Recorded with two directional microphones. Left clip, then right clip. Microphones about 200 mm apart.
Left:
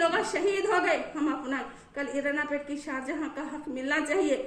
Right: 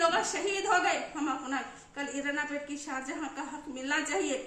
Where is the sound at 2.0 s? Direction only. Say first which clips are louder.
Left 4 dB; 10° right (ahead or behind).